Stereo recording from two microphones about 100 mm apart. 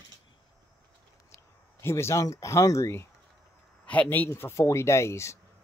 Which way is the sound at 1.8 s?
25° left (ahead or behind).